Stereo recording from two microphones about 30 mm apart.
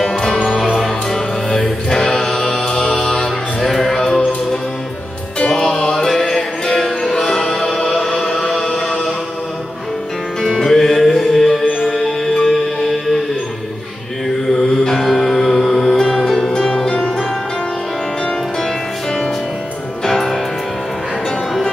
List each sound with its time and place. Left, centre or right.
0.5 s music: centre; by 3.3 s left
3.6 s music: centre
3.9 s music: left
5.5 s music: left
6.0 s music: centre
7.6 s music: centre
8.0 s chant: centre
10.7 s music: centre
14.5 s music: centre
16.3 s music: left
20.1 s music: centre